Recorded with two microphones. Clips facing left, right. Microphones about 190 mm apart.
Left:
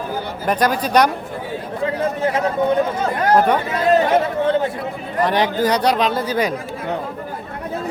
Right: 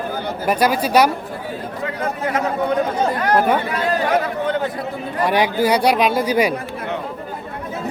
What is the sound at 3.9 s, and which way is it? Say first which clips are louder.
Speech: left 5 dB; 25° left (ahead or behind).